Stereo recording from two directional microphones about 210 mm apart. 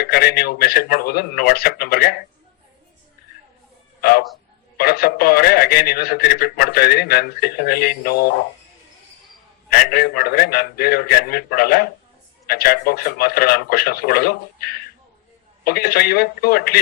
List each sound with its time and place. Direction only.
0.0 s a man's voice: 45° left (ahead or behind)
4.0 s a man's voice: 45° left (ahead or behind)
9.6 s a man's voice: 45° left (ahead or behind)